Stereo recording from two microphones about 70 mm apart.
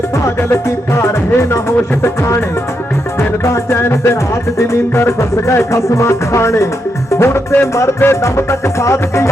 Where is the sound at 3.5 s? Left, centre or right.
Left.